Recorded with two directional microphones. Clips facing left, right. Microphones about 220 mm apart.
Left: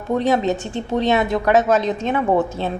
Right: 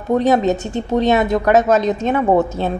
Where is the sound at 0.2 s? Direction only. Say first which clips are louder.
Right 3 dB; 40° right (ahead or behind).